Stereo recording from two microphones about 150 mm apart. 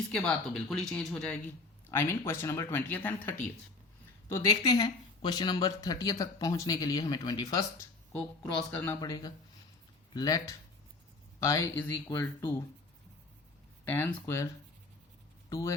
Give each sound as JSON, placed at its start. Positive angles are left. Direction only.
{"t": 0.1, "sound": "speech", "side_deg": 5}
{"t": 1.9, "sound": "speech", "side_deg": 15}
{"t": 4.4, "sound": "speech", "side_deg": 25}
{"t": 8.1, "sound": "speech", "side_deg": 10}
{"t": 9.0, "sound": "speech", "side_deg": 25}
{"t": 11.8, "sound": "speech", "side_deg": 10}
{"t": 13.8, "sound": "speech", "side_deg": 15}